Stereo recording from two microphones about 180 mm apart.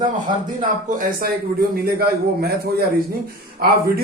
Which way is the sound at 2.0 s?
60° right (ahead or behind).